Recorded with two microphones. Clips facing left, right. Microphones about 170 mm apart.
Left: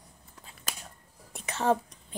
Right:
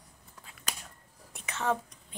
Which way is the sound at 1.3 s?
35° left (ahead or behind).